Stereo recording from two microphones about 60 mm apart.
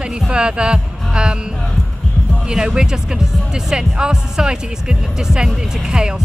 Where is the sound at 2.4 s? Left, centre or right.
Centre.